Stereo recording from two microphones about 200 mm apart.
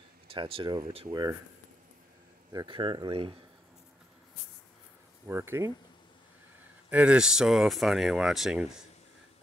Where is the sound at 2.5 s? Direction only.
25° right (ahead or behind).